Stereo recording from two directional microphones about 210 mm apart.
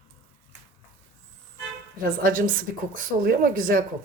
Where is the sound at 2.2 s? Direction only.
40° right (ahead or behind).